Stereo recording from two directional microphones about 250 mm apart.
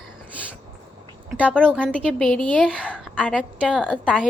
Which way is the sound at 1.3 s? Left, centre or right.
Centre.